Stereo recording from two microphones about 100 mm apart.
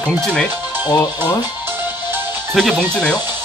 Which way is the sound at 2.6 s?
5° left (ahead or behind).